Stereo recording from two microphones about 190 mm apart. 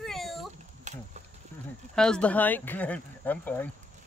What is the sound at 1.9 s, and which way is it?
Speech, 5° left (ahead or behind).